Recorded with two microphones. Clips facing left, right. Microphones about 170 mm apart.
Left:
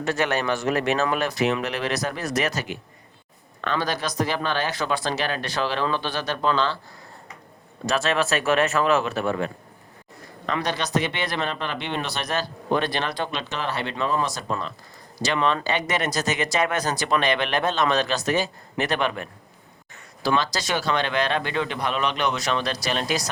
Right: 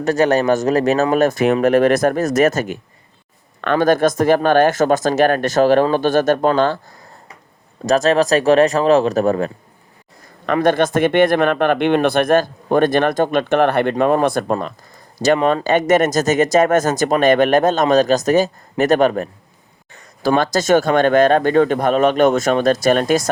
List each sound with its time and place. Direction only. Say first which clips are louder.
0.0 s speech: right 9 dB; 40° right (ahead or behind)
7.9 s speech: right 9 dB; 40° right (ahead or behind)
10.4 s speech: right 12 dB; 55° right (ahead or behind)